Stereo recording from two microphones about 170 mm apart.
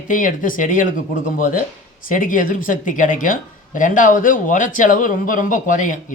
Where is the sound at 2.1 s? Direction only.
50° left (ahead or behind).